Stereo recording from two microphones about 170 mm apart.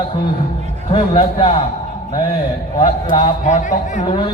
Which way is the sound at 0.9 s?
35° left (ahead or behind).